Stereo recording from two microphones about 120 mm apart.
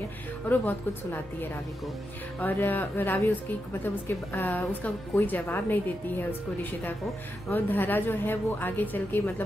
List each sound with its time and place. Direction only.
0.5 s a woman's voice: 15° left (ahead or behind)